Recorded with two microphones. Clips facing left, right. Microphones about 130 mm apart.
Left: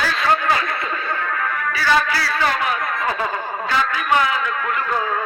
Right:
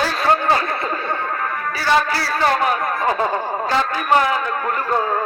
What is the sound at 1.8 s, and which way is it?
A man's voice, 35° right (ahead or behind).